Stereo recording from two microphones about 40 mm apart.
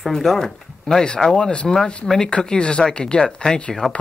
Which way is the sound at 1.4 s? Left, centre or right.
Left.